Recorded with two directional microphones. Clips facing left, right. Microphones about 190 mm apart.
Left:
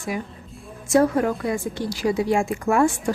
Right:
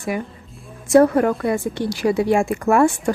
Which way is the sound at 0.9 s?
60° right (ahead or behind).